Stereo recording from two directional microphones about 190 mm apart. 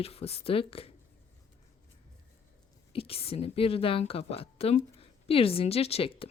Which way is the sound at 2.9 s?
30° left (ahead or behind).